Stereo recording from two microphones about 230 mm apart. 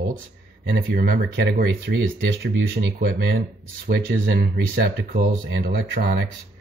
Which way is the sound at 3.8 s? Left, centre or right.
Right.